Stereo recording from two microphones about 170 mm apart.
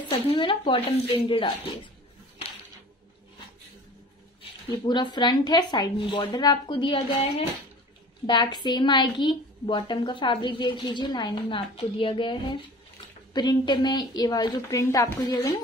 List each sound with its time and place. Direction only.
0.1 s a woman's voice: 30° left (ahead or behind)
4.4 s a woman's voice: 25° left (ahead or behind)